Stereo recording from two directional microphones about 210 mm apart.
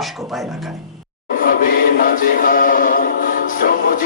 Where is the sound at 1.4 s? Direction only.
45° left (ahead or behind).